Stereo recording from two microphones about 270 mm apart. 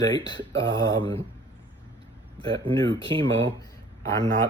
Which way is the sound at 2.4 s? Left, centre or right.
Centre.